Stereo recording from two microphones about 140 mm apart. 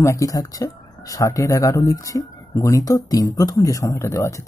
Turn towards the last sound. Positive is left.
turn(degrees=20)  # may be behind; listen again after turning